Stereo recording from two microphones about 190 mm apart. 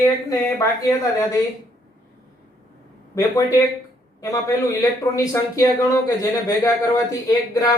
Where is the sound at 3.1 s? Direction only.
15° left (ahead or behind).